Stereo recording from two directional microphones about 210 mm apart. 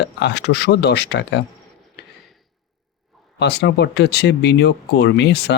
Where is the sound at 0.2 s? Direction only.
55° left (ahead or behind).